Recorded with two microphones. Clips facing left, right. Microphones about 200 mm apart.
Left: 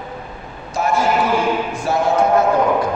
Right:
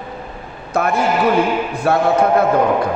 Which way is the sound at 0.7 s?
60° right (ahead or behind).